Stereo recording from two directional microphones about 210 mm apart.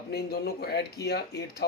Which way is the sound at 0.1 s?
50° left (ahead or behind).